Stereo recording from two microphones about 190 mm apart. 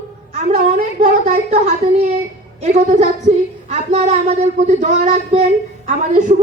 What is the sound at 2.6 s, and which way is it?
Speech, 35° right (ahead or behind).